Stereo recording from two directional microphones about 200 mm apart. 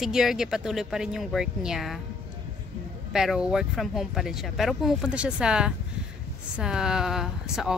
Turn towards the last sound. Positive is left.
turn(degrees=0)  # may be behind; listen again after turning